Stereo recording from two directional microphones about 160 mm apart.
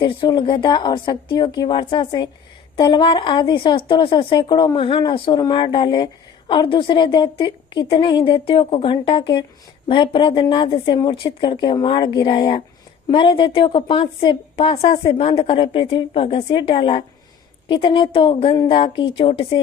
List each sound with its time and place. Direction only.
0.0 s speech: 30° left (ahead or behind)